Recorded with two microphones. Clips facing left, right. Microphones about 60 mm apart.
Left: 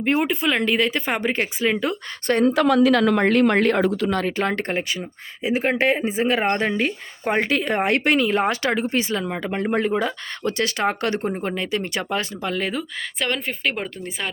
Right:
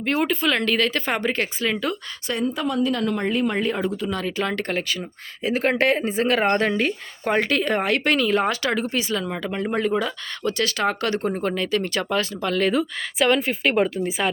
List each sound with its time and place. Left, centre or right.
0.0 s speech: left
2.2 s speech: left
2.5 s speech: left
4.1 s speech: left; by 6.9 s centre
7.3 s speech: centre
12.5 s speech: centre
12.7 s a woman's voice: centre